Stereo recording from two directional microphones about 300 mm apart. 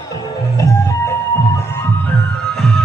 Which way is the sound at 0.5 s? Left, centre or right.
Centre.